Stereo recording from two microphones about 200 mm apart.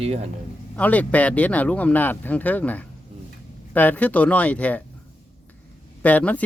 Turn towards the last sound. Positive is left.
turn(degrees=5)  # may be behind; listen again after turning